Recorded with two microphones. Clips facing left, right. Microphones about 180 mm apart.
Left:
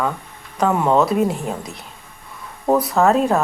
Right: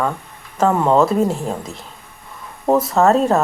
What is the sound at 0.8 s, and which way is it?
Speech, 10° right (ahead or behind).